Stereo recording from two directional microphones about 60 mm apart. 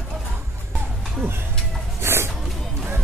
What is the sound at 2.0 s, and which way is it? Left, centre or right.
Music, right.